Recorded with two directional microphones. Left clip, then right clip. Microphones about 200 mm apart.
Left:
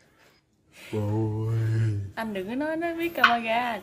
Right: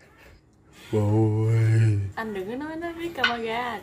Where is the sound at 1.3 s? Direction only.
10° right (ahead or behind).